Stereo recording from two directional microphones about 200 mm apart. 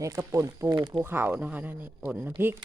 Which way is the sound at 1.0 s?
10° right (ahead or behind).